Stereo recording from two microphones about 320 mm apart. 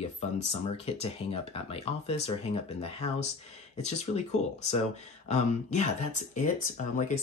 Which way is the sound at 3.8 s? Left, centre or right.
Left.